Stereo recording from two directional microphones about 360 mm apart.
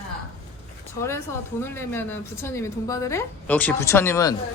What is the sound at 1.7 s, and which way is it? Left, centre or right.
A woman's voice, centre.